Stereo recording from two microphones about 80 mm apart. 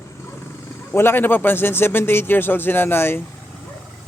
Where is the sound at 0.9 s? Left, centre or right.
Left.